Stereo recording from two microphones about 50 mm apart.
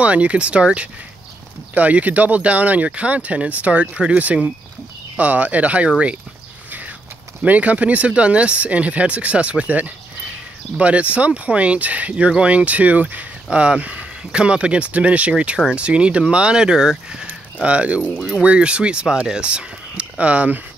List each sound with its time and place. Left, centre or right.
0.0 s speech: right
7.4 s speech: right; by 17.3 s centre
17.3 s a sound: right
18.4 s speech: right